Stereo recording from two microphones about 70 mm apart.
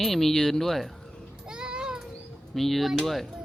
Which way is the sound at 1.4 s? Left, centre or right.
Centre.